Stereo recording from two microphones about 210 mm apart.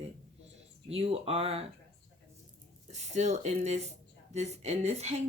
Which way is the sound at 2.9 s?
35° right (ahead or behind).